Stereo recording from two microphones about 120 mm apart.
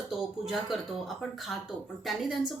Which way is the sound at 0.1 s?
Centre (ahead or behind).